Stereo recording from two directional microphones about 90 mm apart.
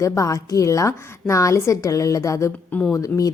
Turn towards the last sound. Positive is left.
turn(degrees=40)  # may be behind; listen again after turning